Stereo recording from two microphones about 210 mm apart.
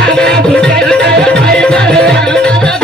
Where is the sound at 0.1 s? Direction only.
5° left (ahead or behind).